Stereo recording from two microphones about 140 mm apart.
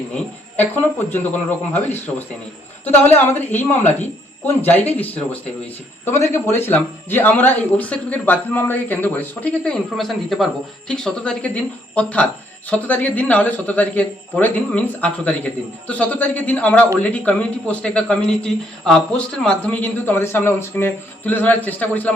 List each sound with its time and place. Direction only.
0.9 s speech: 15° left (ahead or behind)